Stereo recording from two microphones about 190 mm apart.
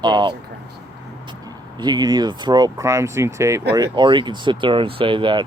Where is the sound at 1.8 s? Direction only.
20° right (ahead or behind).